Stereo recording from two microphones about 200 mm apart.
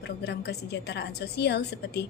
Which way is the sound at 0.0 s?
55° left (ahead or behind).